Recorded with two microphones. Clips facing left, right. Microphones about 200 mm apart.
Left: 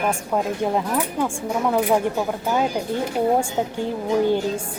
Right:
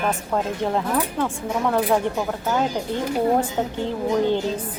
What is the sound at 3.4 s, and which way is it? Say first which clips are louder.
Speech: even; 10° left (ahead or behind).